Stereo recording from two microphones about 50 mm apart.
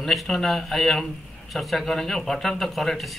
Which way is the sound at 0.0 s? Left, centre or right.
Centre.